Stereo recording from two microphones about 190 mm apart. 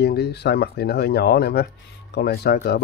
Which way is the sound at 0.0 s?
60° left (ahead or behind).